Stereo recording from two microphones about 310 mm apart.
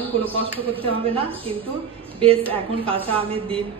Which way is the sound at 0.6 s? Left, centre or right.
Centre.